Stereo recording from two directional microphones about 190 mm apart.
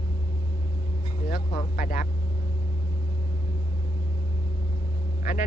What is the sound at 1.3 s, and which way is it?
Speech, 50° left (ahead or behind).